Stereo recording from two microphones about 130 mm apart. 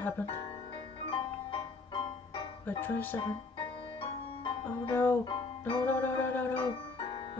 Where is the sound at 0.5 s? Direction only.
45° left (ahead or behind).